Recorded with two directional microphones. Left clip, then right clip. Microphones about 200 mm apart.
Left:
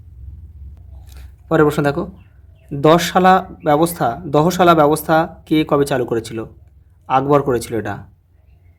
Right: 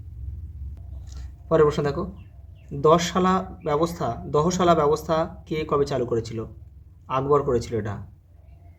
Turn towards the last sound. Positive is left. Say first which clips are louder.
# left 5 dB
turn(degrees=50)  # may be behind; listen again after turning